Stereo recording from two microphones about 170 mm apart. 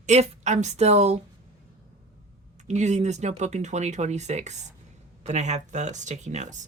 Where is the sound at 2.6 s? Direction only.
45° right (ahead or behind).